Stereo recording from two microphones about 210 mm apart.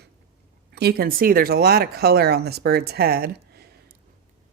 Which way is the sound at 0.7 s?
50° right (ahead or behind).